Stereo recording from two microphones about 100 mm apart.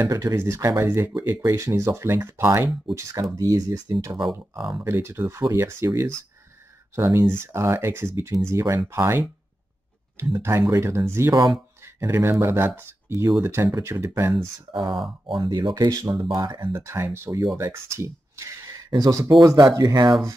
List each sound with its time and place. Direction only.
0.1 s speech: 30° right (ahead or behind)
4.7 s speech: 25° right (ahead or behind)
11.3 s speech: 40° right (ahead or behind)
11.8 s speech: 25° right (ahead or behind)
14.7 s speech: 55° right (ahead or behind)
15.7 s speech: 40° right (ahead or behind)
16.8 s speech: 25° right (ahead or behind)